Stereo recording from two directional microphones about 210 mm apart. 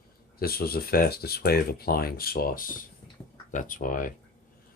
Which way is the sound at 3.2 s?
5° left (ahead or behind).